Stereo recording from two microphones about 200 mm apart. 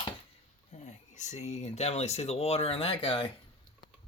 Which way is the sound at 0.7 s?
35° left (ahead or behind).